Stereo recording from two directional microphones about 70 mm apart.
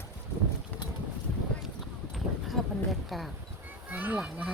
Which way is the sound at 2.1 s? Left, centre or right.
Centre.